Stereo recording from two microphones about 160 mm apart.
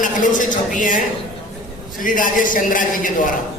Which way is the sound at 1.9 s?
55° left (ahead or behind).